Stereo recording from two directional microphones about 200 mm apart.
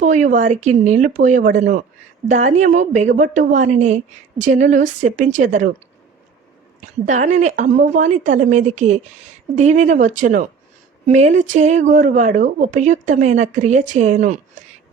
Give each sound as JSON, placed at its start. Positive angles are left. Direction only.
{"t": 0.0, "sound": "speech", "side_deg": -40}
{"t": 7.0, "sound": "speech", "side_deg": -35}